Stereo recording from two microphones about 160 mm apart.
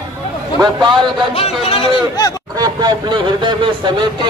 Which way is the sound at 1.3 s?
40° left (ahead or behind).